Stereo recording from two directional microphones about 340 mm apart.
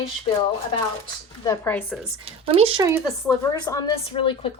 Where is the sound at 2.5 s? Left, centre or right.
Centre.